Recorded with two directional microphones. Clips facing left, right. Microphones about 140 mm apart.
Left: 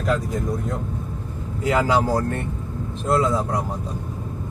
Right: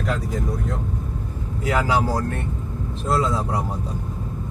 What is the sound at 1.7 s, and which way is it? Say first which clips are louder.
Speech: left 2 dB; 25° left (ahead or behind).